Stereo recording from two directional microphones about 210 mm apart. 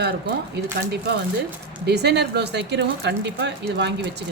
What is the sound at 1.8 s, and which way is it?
Speech, 50° right (ahead or behind).